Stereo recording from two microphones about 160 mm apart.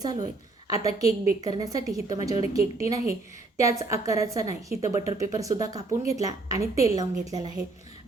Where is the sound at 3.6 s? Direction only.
20° right (ahead or behind).